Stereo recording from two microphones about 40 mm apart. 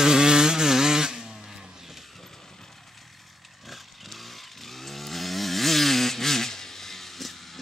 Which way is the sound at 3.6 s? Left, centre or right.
Centre.